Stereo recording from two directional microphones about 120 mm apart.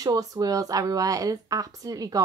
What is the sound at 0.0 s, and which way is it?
Speech, 30° right (ahead or behind).